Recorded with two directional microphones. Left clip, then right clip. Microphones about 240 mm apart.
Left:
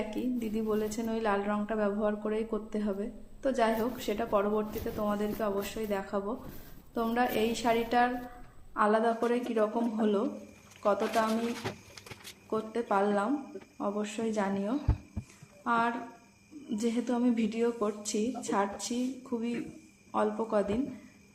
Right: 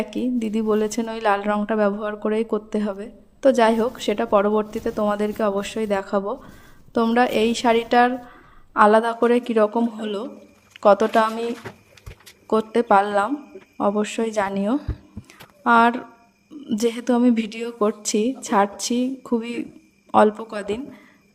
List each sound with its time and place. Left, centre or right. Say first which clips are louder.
0.1 s a woman's voice: right 9 dB; right
12.5 s a woman's voice: right 14 dB; right